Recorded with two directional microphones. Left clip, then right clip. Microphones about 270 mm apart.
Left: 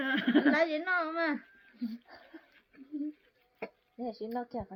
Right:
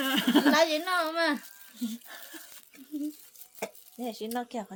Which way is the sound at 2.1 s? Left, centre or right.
Centre.